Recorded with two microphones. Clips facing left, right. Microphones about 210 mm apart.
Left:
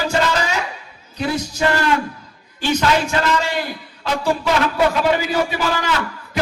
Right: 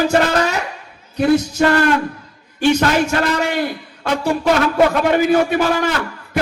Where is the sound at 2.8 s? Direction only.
55° right (ahead or behind).